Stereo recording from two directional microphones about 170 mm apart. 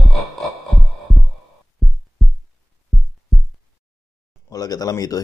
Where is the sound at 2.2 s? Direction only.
Centre (ahead or behind).